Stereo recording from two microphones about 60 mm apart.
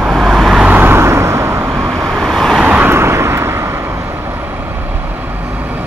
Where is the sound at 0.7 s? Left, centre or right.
Right.